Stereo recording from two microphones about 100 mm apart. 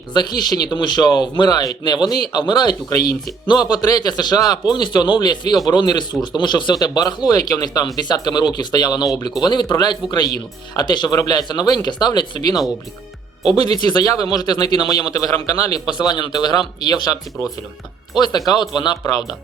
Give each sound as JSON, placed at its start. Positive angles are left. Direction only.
{"t": 0.1, "sound": "speech", "side_deg": 45}
{"t": 13.6, "sound": "speech", "side_deg": 45}
{"t": 16.0, "sound": "speech", "side_deg": 50}
{"t": 18.2, "sound": "speech", "side_deg": 45}